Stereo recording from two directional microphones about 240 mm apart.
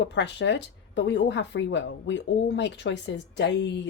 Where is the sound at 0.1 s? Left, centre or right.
Left.